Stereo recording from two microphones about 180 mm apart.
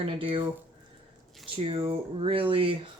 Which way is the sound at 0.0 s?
30° right (ahead or behind).